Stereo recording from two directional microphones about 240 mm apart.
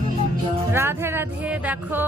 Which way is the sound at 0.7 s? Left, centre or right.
Centre.